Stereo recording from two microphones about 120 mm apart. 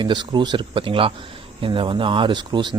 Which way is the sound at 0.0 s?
40° right (ahead or behind).